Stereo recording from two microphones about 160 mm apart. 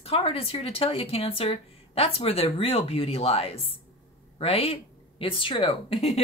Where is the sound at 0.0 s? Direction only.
40° left (ahead or behind).